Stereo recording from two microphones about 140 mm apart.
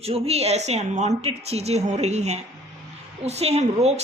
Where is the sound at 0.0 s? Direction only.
45° right (ahead or behind).